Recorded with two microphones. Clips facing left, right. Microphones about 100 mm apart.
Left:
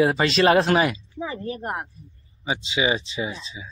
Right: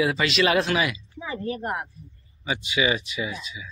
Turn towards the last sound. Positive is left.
turn(degrees=30)  # may be behind; listen again after turning